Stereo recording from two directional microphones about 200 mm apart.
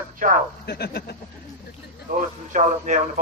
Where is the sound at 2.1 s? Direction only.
40° right (ahead or behind).